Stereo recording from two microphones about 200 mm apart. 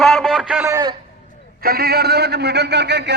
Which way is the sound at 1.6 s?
50° right (ahead or behind).